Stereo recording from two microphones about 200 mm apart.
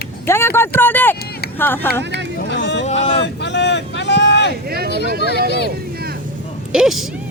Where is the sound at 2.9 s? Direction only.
60° left (ahead or behind).